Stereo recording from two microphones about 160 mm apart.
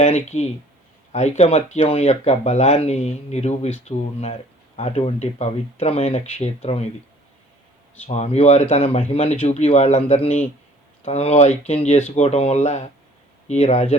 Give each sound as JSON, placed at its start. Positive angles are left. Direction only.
{"t": 0.0, "sound": "speech", "side_deg": 45}
{"t": 8.0, "sound": "speech", "side_deg": 45}